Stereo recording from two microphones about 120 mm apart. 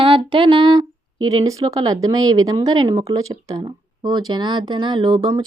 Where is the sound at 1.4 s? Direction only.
35° right (ahead or behind).